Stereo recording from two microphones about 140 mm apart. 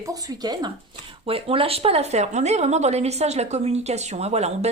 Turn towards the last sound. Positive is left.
turn(degrees=-50)  # may be behind; listen again after turning